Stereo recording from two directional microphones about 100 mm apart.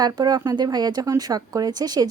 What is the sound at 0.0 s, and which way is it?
Speech, 40° right (ahead or behind).